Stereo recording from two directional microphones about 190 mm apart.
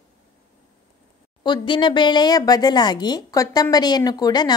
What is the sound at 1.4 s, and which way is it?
A woman's voice, 25° left (ahead or behind).